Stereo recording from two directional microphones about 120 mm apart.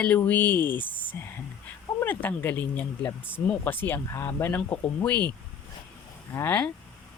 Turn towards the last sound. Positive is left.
turn(degrees=20)  # may be behind; listen again after turning